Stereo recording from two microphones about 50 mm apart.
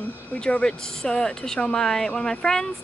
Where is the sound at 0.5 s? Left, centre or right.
Centre.